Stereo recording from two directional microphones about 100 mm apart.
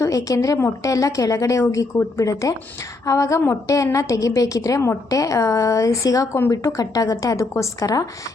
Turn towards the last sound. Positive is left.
turn(degrees=35)  # may be behind; listen again after turning